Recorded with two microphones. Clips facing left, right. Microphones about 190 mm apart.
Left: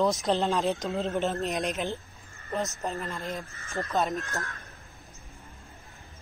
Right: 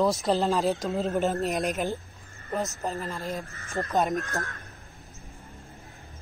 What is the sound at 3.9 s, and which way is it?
Speech, 15° right (ahead or behind).